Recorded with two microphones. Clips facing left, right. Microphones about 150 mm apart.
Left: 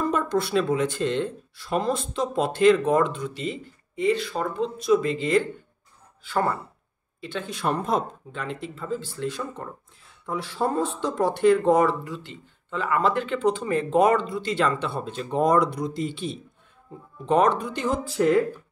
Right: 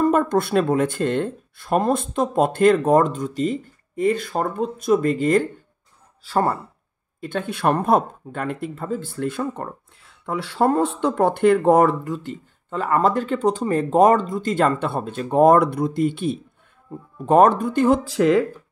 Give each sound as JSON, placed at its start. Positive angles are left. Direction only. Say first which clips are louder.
{"t": 0.0, "sound": "speech", "louder": "right 6 dB", "side_deg": -50}
{"t": 7.2, "sound": "speech", "louder": "right 6 dB", "side_deg": -50}